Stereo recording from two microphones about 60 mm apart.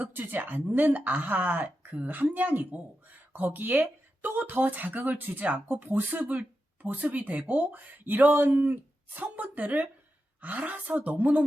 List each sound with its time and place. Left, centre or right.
0.0 s speech: right